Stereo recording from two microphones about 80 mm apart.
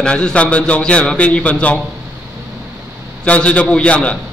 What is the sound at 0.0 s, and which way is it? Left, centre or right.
A man's voice, centre.